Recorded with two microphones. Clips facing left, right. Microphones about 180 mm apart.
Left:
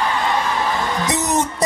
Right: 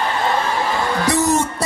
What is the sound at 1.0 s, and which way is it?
Music, 20° left (ahead or behind).